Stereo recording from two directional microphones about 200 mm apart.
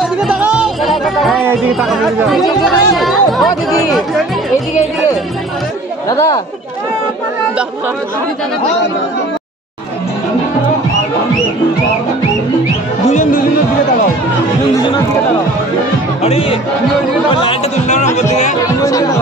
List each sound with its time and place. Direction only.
0.0 s music: 5° right (ahead or behind)
6.0 s speech: 20° left (ahead or behind)
13.1 s speech: 40° left (ahead or behind)
16.2 s speech: 30° left (ahead or behind)
18.8 s speech: 15° left (ahead or behind)